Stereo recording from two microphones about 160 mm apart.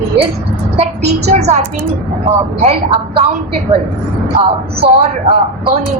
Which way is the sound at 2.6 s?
40° right (ahead or behind).